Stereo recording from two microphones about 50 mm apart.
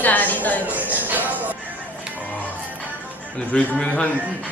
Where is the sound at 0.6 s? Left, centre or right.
Right.